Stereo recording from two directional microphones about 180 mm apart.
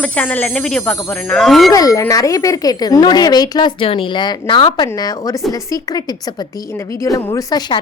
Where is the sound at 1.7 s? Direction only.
20° left (ahead or behind).